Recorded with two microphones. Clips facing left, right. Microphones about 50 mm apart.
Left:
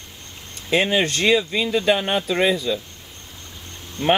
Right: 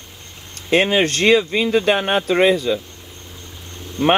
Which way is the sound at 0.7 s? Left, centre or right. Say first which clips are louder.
Right 3 dB; right.